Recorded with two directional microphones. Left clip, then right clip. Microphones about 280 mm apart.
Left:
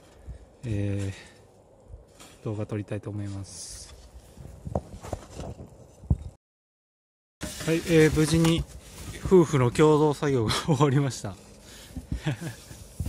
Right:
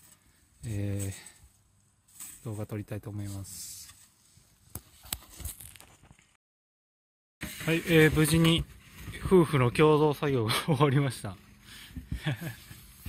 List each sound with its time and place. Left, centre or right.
0.7 s speech: centre
2.4 s speech: centre
7.3 s a sound: left
7.6 s speech: centre